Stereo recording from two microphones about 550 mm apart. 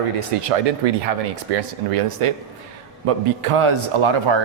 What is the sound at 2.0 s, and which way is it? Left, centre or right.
A man's voice, right.